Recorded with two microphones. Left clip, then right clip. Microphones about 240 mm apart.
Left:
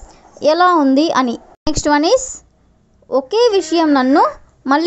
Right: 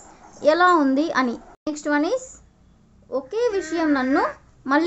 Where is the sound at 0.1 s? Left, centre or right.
Left.